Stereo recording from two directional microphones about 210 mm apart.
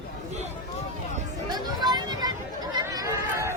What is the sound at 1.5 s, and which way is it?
Chatter, 20° right (ahead or behind).